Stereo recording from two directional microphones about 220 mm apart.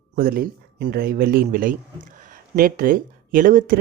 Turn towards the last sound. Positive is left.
turn(degrees=-40)  # may be behind; listen again after turning